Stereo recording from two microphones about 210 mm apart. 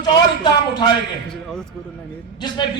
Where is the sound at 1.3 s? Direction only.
Centre (ahead or behind).